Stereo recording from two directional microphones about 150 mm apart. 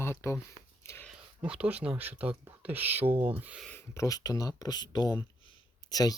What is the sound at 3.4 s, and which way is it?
Speech, 10° right (ahead or behind).